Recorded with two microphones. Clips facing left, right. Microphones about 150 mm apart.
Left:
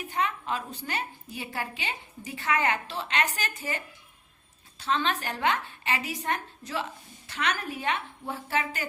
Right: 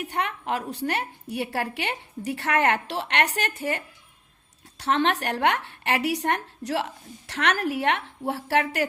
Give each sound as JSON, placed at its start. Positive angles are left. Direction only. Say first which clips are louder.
{"t": 0.0, "sound": "a woman's voice", "louder": "right 1 dB", "side_deg": -70}
{"t": 4.8, "sound": "a woman's voice", "louder": "right 5 dB", "side_deg": -70}